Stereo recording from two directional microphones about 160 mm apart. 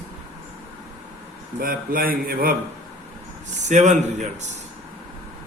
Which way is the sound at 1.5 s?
65° right (ahead or behind).